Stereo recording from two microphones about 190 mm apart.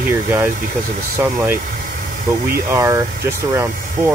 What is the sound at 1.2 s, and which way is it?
Speech, 10° right (ahead or behind).